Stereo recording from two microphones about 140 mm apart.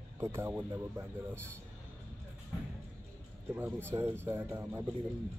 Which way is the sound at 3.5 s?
15° right (ahead or behind).